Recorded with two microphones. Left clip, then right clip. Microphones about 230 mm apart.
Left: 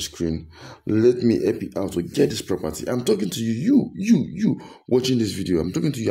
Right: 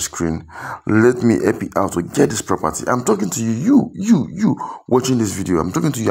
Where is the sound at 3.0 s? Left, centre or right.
Centre.